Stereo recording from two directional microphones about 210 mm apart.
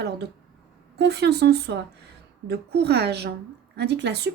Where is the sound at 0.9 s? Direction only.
55° right (ahead or behind).